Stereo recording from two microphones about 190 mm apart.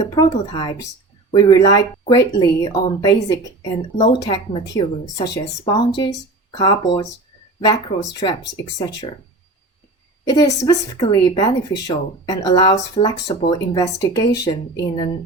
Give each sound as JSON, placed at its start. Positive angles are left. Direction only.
{"t": 0.0, "sound": "speech", "side_deg": 20}
{"t": 10.2, "sound": "speech", "side_deg": 20}